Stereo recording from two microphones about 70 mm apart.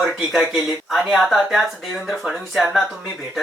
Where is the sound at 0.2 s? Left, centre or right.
Centre.